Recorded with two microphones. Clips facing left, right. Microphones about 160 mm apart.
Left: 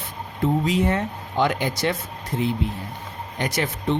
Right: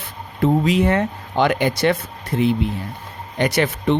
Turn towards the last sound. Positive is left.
turn(degrees=-70)  # may be behind; listen again after turning